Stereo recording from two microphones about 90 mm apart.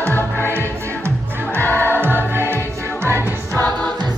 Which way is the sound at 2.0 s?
25° right (ahead or behind).